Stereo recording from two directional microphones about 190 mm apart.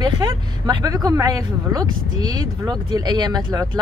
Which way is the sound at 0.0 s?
20° right (ahead or behind).